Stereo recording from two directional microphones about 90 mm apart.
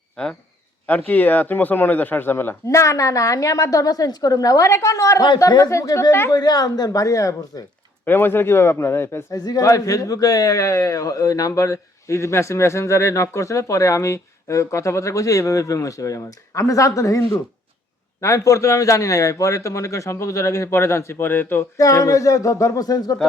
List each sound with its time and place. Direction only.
0.9 s speech: 20° left (ahead or behind)
2.6 s a man's voice: 35° left (ahead or behind)
6.3 s speech: 45° left (ahead or behind)
8.0 s speech: 25° left (ahead or behind)
9.4 s a man's voice: 45° left (ahead or behind); by 21.7 s 25° left (ahead or behind)
21.8 s a man's voice: 40° left (ahead or behind)